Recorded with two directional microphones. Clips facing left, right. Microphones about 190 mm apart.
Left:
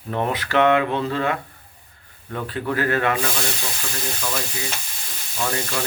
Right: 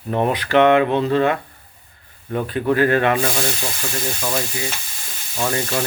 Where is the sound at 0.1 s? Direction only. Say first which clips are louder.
Right 5 dB; 25° right (ahead or behind).